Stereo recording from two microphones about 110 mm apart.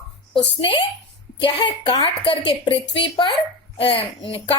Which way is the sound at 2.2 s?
55° left (ahead or behind).